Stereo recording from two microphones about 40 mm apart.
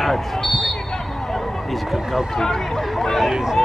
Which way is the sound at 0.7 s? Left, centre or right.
Centre.